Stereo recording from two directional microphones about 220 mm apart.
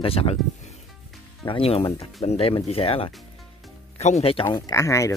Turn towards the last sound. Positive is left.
turn(degrees=15)  # may be behind; listen again after turning